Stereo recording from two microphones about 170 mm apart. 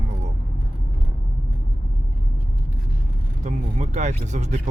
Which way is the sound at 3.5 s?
40° right (ahead or behind).